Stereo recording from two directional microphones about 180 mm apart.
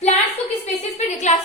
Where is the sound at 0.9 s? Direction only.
40° left (ahead or behind).